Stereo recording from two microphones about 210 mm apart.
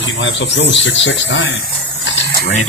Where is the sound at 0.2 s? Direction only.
60° left (ahead or behind).